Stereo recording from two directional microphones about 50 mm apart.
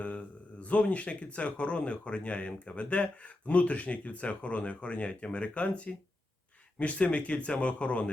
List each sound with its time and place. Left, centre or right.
0.0 s speech: left